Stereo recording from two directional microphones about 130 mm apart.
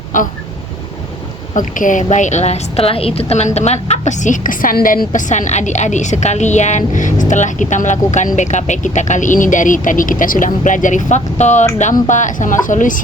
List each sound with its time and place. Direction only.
1.5 s a woman's voice: 85° left